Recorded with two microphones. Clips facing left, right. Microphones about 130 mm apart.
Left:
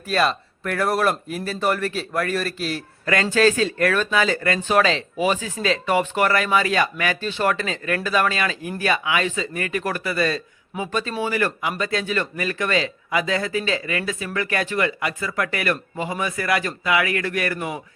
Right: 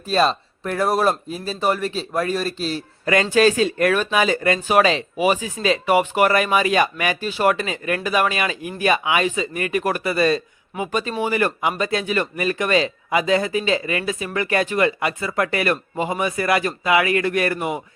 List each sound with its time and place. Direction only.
0.1 s a man's voice: 25° right (ahead or behind)